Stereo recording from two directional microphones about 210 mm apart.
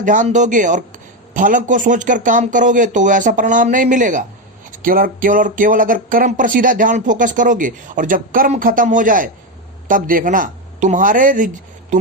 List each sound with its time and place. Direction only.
0.0 s speech: 35° right (ahead or behind)